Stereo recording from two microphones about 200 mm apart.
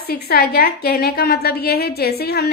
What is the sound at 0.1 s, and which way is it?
A woman's voice, 50° left (ahead or behind).